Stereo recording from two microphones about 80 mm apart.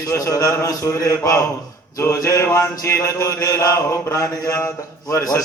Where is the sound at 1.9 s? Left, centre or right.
Left.